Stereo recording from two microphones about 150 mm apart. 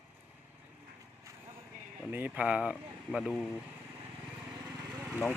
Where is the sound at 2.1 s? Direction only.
10° right (ahead or behind).